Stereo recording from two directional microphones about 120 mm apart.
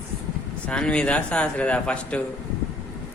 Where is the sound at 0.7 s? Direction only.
10° left (ahead or behind).